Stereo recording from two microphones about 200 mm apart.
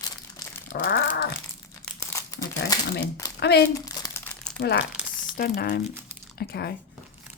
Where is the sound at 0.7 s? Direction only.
55° left (ahead or behind).